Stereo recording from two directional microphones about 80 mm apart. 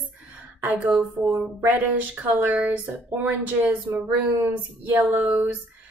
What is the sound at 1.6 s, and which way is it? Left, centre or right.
Speech, right.